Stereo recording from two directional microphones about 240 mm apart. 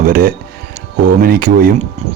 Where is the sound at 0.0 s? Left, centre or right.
Right.